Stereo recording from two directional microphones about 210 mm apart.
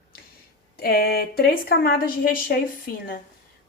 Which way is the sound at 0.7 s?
45° left (ahead or behind).